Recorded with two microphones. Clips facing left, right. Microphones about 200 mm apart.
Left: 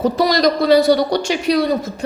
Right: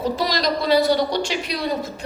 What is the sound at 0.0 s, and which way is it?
Speech, 45° left (ahead or behind).